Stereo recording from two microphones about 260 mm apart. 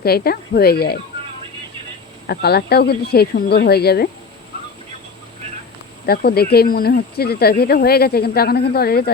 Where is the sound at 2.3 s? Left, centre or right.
Left.